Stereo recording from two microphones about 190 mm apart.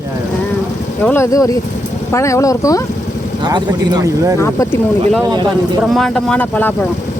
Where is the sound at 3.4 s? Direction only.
20° right (ahead or behind).